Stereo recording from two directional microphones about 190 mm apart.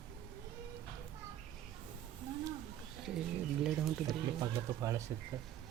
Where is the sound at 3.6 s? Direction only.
Centre (ahead or behind).